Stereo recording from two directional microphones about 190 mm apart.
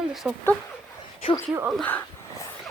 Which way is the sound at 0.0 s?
Centre (ahead or behind).